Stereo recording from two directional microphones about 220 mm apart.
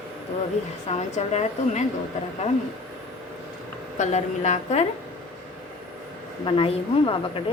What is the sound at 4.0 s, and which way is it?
Speech, 30° left (ahead or behind).